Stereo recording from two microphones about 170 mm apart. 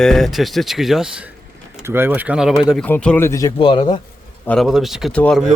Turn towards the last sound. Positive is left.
turn(degrees=5)  # may be behind; listen again after turning